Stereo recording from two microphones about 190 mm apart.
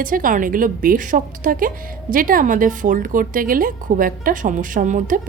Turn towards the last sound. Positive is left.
turn(degrees=-45)  # may be behind; listen again after turning